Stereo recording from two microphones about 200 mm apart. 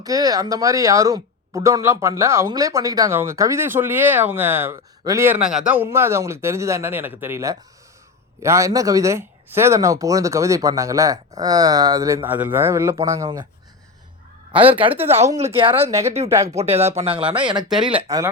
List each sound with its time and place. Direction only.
0.0 s speech: 20° right (ahead or behind)
14.7 s speech: 25° right (ahead or behind)
14.9 s speech: 10° right (ahead or behind)
15.4 s speech: 30° right (ahead or behind)
15.9 s speech: 15° right (ahead or behind)
16.6 s speech: 30° right (ahead or behind)